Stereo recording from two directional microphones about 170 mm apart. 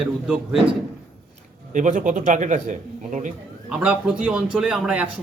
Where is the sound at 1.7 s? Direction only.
50° right (ahead or behind).